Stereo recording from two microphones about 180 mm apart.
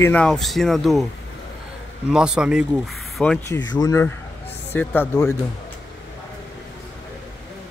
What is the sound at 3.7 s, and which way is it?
A man's voice, 20° left (ahead or behind).